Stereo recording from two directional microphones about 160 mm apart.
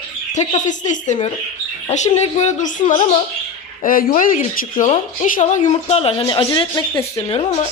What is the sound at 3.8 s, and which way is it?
Speech, 60° left (ahead or behind).